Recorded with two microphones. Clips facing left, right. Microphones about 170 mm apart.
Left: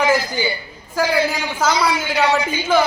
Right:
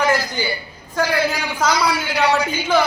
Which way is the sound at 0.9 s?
5° left (ahead or behind).